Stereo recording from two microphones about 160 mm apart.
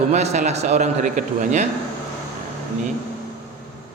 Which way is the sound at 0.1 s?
45° right (ahead or behind).